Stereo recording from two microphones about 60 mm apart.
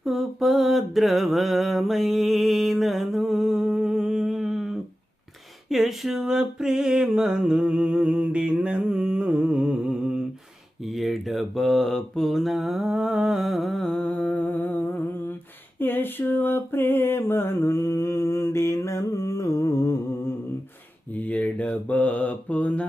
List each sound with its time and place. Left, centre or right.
0.0 s mantra: centre
5.6 s a sound: centre
10.8 s mantra: centre
14.0 s humming: left
15.8 s a sound: left
21.1 s mantra: left